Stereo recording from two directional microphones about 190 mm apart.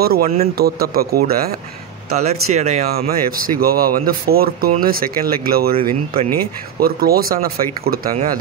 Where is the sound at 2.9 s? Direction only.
50° right (ahead or behind).